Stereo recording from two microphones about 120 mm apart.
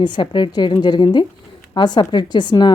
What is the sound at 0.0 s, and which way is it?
A woman's voice, 40° left (ahead or behind).